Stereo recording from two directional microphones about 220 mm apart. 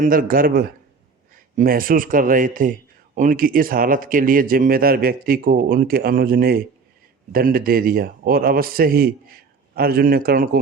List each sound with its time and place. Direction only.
0.0 s a man's voice: 40° right (ahead or behind)